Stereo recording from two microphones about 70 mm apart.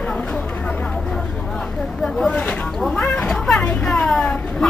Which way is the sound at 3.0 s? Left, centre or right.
Centre.